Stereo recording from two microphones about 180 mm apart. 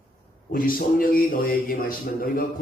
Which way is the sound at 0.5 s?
55° left (ahead or behind).